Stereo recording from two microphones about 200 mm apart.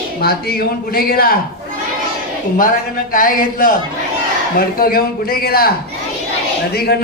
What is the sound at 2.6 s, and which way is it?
Speech, 45° left (ahead or behind).